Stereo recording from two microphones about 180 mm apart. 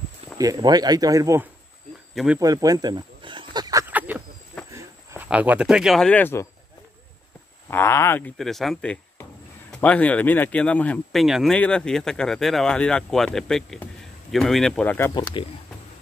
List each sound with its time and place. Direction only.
0.4 s speech: 20° right (ahead or behind)
2.1 s speech: 5° right (ahead or behind)
2.4 s snake: 20° right (ahead or behind)
4.7 s speech: 10° right (ahead or behind); by 6.4 s 10° left (ahead or behind)
7.7 s speech: 15° left (ahead or behind)
8.4 s speech: centre (ahead or behind)
15.1 s speech: 25° left (ahead or behind)